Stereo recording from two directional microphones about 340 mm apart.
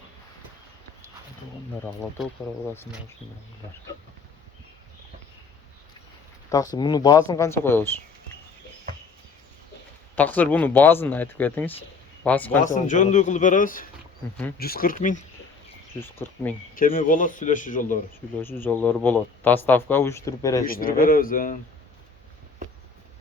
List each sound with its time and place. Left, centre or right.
1.8 s speech: centre
6.5 s speech: centre
10.2 s speech: centre
12.6 s speech: left
16.0 s speech: centre
16.7 s speech: left
18.4 s speech: centre
20.7 s speech: left